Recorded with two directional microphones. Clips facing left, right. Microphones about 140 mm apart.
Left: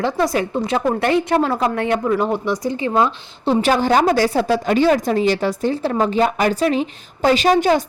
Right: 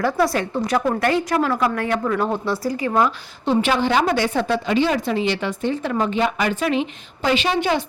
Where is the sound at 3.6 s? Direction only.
40° left (ahead or behind).